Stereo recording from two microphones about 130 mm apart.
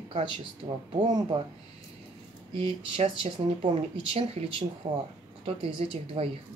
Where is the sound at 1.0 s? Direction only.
35° right (ahead or behind).